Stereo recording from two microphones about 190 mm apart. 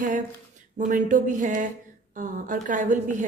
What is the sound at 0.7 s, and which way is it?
A woman's voice, 45° right (ahead or behind).